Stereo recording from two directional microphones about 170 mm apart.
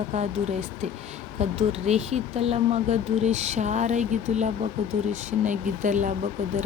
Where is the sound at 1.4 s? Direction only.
40° right (ahead or behind).